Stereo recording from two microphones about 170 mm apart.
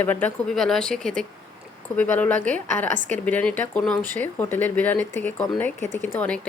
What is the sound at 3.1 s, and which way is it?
Speech, 10° left (ahead or behind).